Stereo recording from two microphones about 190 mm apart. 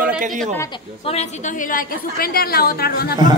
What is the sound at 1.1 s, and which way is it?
A woman's voice, 40° left (ahead or behind).